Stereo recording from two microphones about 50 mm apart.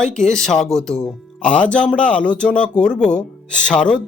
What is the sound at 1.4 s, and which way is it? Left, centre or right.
Speech, left.